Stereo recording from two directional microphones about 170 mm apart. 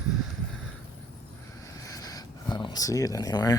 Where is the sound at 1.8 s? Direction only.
20° left (ahead or behind).